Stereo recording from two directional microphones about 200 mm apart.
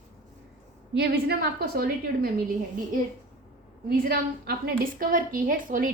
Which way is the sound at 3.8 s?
50° right (ahead or behind).